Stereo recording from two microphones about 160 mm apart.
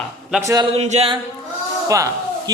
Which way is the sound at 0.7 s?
45° right (ahead or behind).